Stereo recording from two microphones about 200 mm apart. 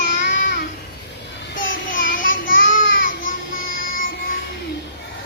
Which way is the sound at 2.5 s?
70° left (ahead or behind).